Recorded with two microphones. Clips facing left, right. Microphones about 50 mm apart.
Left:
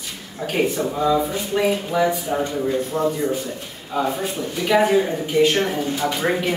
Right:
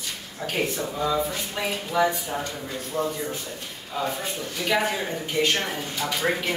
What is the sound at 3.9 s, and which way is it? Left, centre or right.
Speech, centre.